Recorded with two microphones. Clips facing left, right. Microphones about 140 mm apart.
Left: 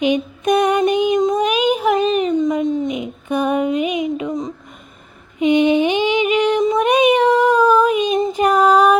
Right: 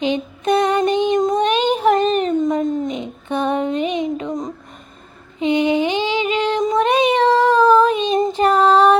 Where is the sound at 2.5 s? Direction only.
10° left (ahead or behind).